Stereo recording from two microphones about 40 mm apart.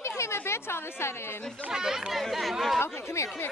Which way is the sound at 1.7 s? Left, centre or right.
Centre.